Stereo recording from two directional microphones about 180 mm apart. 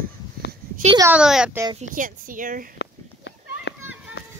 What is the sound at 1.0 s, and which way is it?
Speech, 5° right (ahead or behind).